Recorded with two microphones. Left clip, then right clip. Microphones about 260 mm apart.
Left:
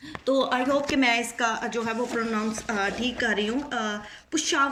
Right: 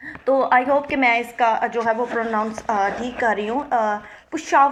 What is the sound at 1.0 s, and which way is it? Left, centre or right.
A woman's voice, right.